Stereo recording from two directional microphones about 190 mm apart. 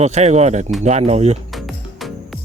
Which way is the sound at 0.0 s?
35° right (ahead or behind).